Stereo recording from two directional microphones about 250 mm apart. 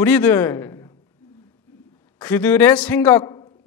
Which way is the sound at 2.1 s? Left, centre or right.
Centre.